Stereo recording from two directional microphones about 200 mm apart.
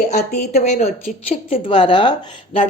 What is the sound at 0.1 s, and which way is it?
A woman's voice, 35° left (ahead or behind).